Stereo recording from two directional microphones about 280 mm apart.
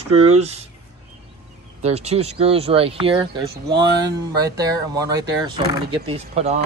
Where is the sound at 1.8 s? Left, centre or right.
Right.